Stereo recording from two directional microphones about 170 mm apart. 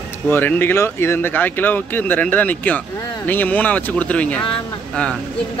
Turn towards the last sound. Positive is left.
turn(degrees=5)  # may be behind; listen again after turning